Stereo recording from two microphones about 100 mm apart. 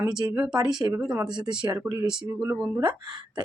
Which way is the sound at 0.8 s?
35° right (ahead or behind).